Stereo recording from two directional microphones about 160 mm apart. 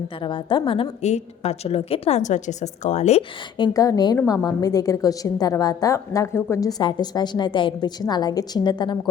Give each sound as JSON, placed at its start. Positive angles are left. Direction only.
{"t": 0.2, "sound": "a woman's voice", "side_deg": 30}
{"t": 3.6, "sound": "a woman's voice", "side_deg": 20}